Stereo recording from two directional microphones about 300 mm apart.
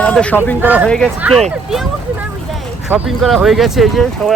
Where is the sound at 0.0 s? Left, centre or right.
Centre.